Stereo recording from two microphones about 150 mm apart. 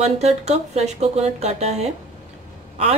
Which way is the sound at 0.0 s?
45° right (ahead or behind).